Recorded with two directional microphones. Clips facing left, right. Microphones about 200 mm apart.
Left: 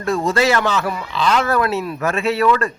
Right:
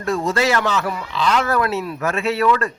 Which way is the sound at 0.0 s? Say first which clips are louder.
Left 2 dB; 30° left (ahead or behind).